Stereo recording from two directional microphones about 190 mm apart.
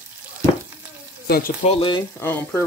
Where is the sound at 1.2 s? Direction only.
55° left (ahead or behind).